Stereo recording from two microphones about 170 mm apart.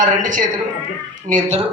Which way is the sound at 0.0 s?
50° right (ahead or behind).